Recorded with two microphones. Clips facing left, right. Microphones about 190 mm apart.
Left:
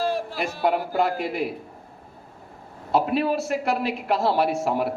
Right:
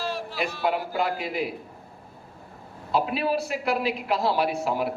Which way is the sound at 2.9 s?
55° left (ahead or behind).